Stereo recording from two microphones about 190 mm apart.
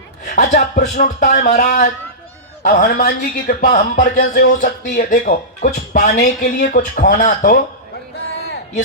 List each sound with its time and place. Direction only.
0.3 s a man's voice: 40° left (ahead or behind)